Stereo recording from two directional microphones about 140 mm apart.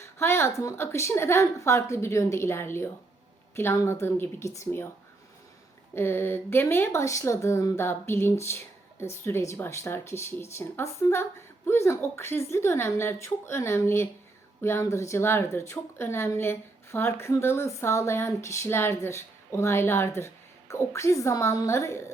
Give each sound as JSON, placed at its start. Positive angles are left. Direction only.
{"t": 0.0, "sound": "a woman's voice", "side_deg": 20}
{"t": 5.9, "sound": "a woman's voice", "side_deg": 15}